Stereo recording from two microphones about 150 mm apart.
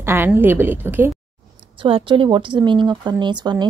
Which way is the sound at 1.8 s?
35° right (ahead or behind).